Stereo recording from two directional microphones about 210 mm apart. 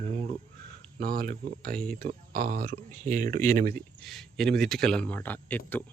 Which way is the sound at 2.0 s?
40° right (ahead or behind).